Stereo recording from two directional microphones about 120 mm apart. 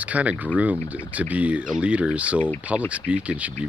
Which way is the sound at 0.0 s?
10° right (ahead or behind).